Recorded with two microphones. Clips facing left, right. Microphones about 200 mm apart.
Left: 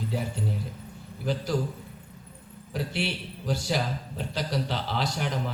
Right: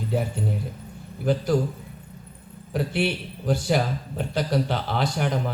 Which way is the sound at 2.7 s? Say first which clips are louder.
Right 6 dB; 55° right (ahead or behind).